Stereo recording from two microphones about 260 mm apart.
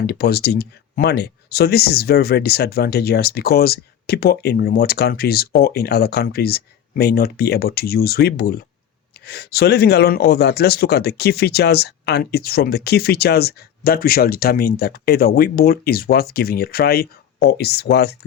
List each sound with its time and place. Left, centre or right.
0.0 s speech: left